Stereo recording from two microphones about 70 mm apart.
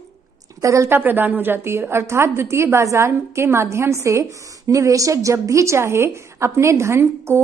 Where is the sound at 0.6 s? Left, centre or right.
Right.